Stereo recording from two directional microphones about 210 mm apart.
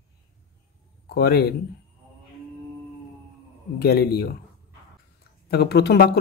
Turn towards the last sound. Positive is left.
turn(degrees=50)  # may be behind; listen again after turning